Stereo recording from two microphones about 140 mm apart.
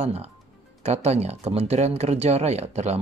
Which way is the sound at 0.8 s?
50° right (ahead or behind).